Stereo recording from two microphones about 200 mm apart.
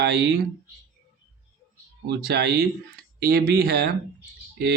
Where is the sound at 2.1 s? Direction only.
55° right (ahead or behind).